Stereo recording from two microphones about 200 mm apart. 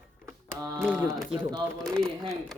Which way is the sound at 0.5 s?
10° right (ahead or behind).